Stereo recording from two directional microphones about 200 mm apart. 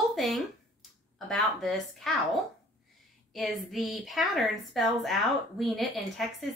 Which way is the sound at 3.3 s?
Centre (ahead or behind).